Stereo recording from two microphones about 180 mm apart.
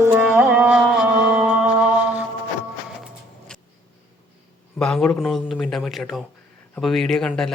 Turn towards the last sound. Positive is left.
turn(degrees=0)  # may be behind; listen again after turning